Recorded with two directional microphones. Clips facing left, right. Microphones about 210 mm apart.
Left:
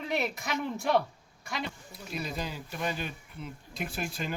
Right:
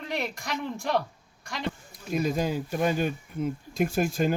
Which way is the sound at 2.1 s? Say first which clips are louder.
Right 10 dB; 45° right (ahead or behind).